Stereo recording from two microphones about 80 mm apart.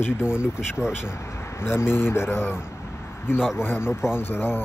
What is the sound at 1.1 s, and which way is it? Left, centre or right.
Speech, left.